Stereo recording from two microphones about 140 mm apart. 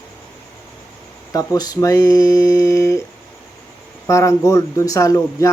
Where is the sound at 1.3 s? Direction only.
25° left (ahead or behind).